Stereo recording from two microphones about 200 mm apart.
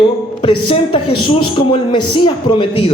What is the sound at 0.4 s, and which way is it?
A woman's voice, 25° left (ahead or behind).